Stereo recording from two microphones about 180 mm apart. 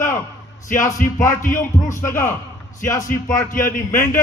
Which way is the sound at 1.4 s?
15° left (ahead or behind).